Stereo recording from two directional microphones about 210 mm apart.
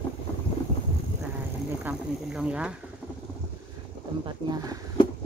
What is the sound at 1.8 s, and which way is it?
Snake, 5° right (ahead or behind).